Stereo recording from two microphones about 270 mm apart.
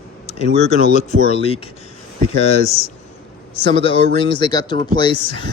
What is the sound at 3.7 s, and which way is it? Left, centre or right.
Speech, centre.